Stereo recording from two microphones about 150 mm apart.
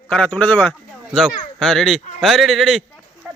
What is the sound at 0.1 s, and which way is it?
Speech, 5° left (ahead or behind).